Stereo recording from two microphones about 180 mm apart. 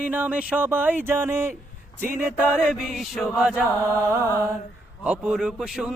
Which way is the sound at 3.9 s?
15° right (ahead or behind).